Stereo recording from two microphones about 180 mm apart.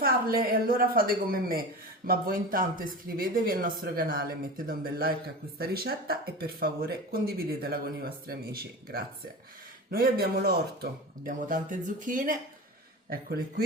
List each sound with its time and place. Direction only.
0.0 s speech: 55° right (ahead or behind)
11.3 s speech: 45° right (ahead or behind)